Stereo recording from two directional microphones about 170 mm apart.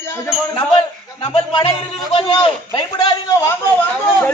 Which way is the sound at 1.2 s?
35° left (ahead or behind).